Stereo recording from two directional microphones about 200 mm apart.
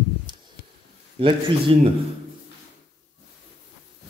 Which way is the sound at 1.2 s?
25° right (ahead or behind).